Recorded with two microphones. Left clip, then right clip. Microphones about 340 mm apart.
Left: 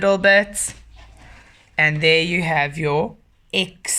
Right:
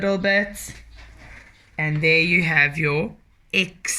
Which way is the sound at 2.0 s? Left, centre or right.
Left.